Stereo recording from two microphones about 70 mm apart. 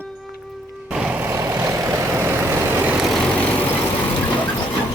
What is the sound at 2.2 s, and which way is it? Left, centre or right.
Vehicle, right.